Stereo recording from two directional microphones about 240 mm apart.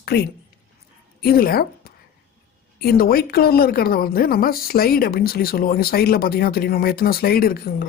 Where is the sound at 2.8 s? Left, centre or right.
Left.